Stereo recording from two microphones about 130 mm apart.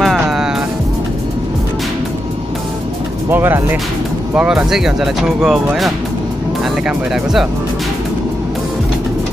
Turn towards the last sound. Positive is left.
turn(degrees=-5)  # may be behind; listen again after turning